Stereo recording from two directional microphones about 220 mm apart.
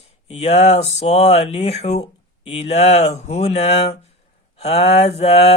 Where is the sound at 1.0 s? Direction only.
30° left (ahead or behind).